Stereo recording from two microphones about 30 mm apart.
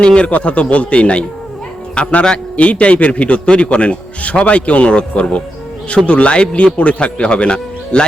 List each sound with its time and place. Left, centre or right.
0.0 s speech: left
0.4 s a man's voice: left